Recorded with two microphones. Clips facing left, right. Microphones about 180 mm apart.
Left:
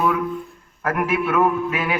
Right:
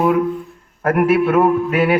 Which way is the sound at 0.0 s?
35° right (ahead or behind).